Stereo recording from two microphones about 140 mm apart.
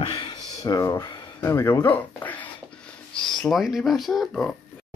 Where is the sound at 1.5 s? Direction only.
20° left (ahead or behind).